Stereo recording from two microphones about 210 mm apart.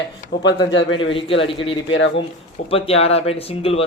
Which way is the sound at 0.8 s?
65° left (ahead or behind).